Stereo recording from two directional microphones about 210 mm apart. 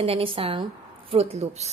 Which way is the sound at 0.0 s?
25° right (ahead or behind).